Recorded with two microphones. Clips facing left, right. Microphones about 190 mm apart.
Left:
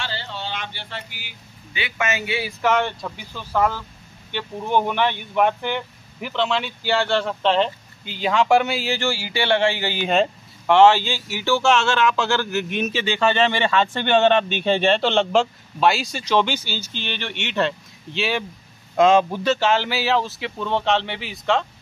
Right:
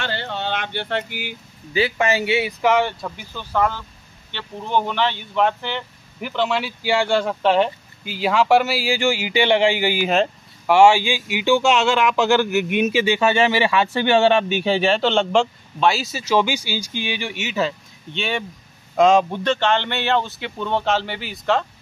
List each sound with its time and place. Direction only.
0.0 s a sound: 55° right (ahead or behind)
1.7 s a man's voice: 35° right (ahead or behind)
2.6 s speech: 10° right (ahead or behind); by 5.9 s 15° left (ahead or behind)
6.2 s speech: 5° right (ahead or behind)